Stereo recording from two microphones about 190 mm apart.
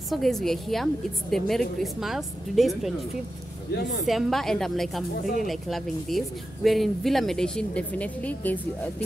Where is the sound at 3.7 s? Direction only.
60° left (ahead or behind).